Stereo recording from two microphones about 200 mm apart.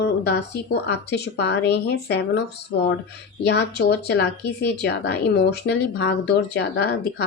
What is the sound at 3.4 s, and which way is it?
Speech, 55° left (ahead or behind).